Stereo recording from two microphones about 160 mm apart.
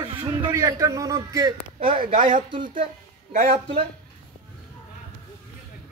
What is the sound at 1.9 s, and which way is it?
Speech, 35° right (ahead or behind).